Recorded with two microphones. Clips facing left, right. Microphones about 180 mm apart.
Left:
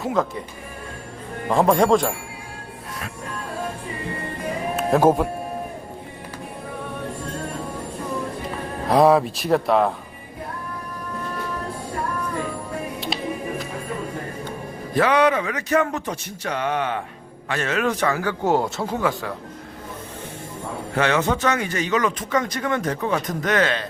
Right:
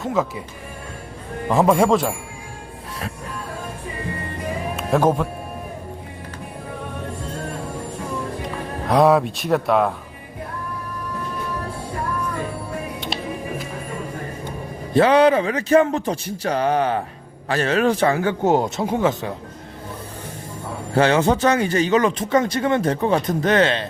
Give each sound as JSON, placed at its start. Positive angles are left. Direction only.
{"t": 0.0, "sound": "speech", "side_deg": -5}
{"t": 1.5, "sound": "speech", "side_deg": -5}
{"t": 4.8, "sound": "speech", "side_deg": 5}
{"t": 8.9, "sound": "speech", "side_deg": 0}
{"t": 14.9, "sound": "a man's voice", "side_deg": -30}
{"t": 20.9, "sound": "a man's voice", "side_deg": -30}